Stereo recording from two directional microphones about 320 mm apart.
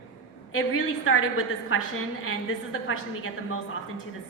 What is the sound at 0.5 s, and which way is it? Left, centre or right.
A woman's voice, left.